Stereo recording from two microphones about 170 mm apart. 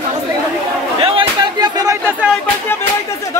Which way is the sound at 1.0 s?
30° right (ahead or behind).